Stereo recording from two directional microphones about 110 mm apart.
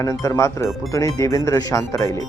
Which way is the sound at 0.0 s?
30° left (ahead or behind).